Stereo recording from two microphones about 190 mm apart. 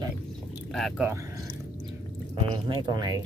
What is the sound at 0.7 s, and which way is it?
Speech, centre (ahead or behind).